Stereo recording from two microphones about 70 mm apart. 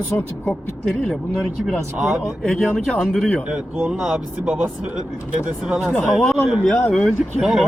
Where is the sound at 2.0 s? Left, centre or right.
Centre.